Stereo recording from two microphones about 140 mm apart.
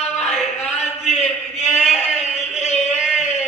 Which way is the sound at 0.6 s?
50° left (ahead or behind).